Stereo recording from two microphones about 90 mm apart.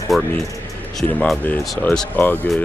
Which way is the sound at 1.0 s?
20° left (ahead or behind).